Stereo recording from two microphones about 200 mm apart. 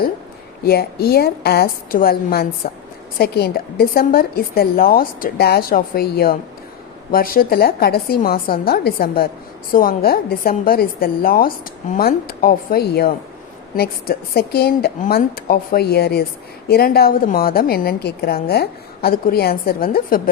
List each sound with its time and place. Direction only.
0.6 s a woman's voice: 50° left (ahead or behind)